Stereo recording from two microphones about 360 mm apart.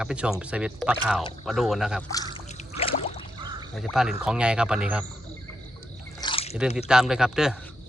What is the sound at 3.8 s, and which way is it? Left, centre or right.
Speech, centre.